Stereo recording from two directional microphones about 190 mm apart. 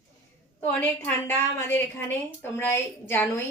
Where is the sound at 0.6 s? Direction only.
10° left (ahead or behind).